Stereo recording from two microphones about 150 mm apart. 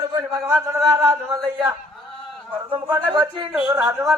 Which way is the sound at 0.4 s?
15° right (ahead or behind).